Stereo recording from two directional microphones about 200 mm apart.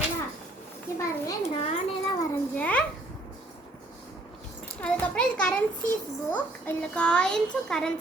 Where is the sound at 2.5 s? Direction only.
5° left (ahead or behind).